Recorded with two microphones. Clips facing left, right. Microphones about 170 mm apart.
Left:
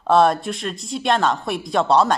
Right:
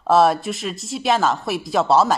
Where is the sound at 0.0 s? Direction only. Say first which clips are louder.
Even; 5° right (ahead or behind).